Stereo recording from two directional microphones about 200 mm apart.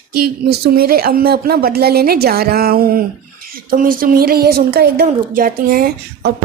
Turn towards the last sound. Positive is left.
turn(degrees=-45)  # may be behind; listen again after turning